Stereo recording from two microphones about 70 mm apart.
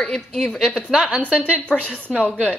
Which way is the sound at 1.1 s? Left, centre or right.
Right.